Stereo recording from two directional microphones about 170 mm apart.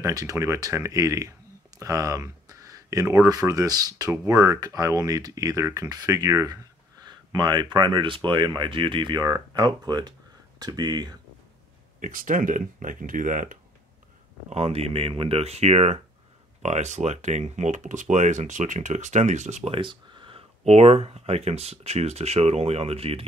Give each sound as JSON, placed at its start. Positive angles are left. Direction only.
{"t": 0.0, "sound": "speech", "side_deg": -20}
{"t": 12.0, "sound": "speech", "side_deg": -50}
{"t": 14.5, "sound": "speech", "side_deg": -35}